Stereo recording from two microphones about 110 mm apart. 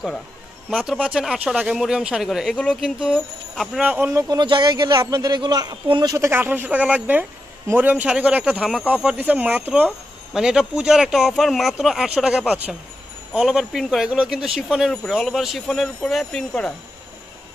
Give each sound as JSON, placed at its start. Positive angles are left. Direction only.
{"t": 0.8, "sound": "speech", "side_deg": -5}
{"t": 4.1, "sound": "speech", "side_deg": -30}
{"t": 4.4, "sound": "speech", "side_deg": -45}
{"t": 4.9, "sound": "a man's voice", "side_deg": -35}
{"t": 6.1, "sound": "speech", "side_deg": -20}